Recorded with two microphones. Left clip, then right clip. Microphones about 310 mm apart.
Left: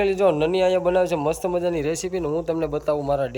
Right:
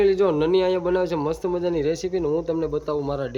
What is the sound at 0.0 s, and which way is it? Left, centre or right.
A man's voice, centre.